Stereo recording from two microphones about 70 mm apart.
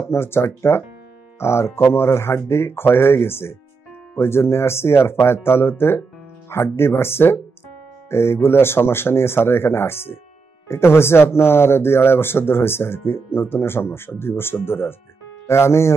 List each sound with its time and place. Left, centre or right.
0.1 s speech: left